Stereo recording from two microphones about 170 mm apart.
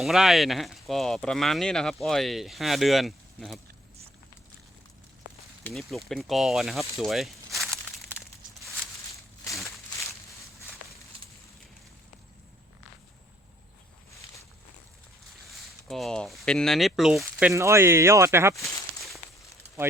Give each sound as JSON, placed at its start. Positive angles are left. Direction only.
{"t": 0.0, "sound": "speech", "side_deg": 0}
{"t": 5.7, "sound": "speech", "side_deg": 0}
{"t": 7.0, "sound": "walk", "side_deg": 0}
{"t": 15.4, "sound": "speech", "side_deg": 0}
{"t": 17.5, "sound": "speech", "side_deg": -15}
{"t": 18.5, "sound": "a sound", "side_deg": 20}